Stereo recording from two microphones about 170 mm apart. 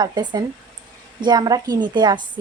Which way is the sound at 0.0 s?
25° right (ahead or behind).